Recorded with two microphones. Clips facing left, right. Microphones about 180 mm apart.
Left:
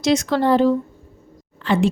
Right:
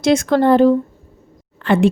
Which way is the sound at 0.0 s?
50° right (ahead or behind).